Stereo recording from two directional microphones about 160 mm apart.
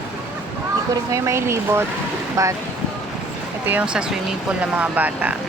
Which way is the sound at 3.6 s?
10° right (ahead or behind).